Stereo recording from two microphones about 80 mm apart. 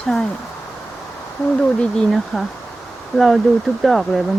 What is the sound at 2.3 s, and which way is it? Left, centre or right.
Speech, centre.